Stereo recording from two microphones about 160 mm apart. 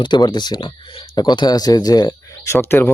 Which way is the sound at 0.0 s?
30° left (ahead or behind).